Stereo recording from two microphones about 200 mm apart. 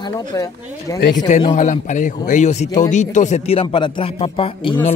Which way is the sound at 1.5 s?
35° left (ahead or behind).